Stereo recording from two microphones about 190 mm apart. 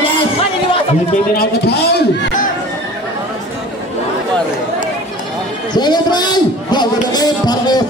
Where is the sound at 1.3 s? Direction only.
55° left (ahead or behind).